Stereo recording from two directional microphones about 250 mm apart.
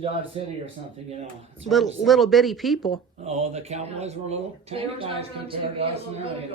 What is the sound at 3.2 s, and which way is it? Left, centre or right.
Speech, right.